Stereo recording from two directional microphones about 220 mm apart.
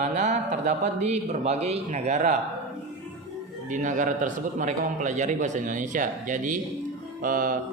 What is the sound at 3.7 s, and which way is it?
A man's voice, 35° right (ahead or behind).